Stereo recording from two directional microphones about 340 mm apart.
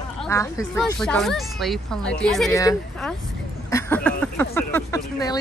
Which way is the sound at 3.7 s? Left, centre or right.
Centre.